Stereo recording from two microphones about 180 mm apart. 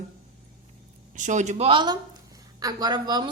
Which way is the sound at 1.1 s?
40° right (ahead or behind).